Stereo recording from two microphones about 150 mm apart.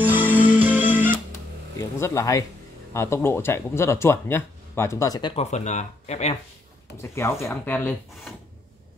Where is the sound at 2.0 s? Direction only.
20° left (ahead or behind).